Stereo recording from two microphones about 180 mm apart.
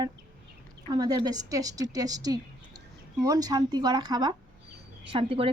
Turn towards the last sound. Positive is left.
turn(degrees=-30)  # may be behind; listen again after turning